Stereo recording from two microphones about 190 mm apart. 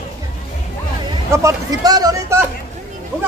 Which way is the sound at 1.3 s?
20° right (ahead or behind).